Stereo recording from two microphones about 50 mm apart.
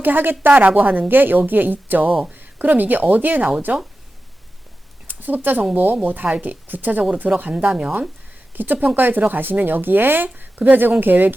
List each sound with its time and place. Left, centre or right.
0.0 s a woman's voice: right
5.0 s a woman's voice: right
8.5 s a woman's voice: right